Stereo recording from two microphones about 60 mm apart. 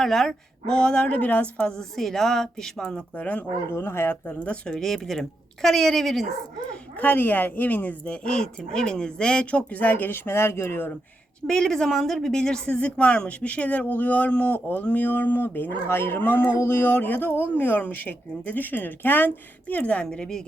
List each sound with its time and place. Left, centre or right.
0.0 s a woman's voice: centre
2.0 s a woman's voice: centre
3.2 s a woman's voice: left
3.7 s speech: left
4.3 s a woman's voice: centre
4.8 s a woman's voice: centre
7.0 s a woman's voice: left
11.4 s a woman's voice: centre
20.1 s a woman's voice: centre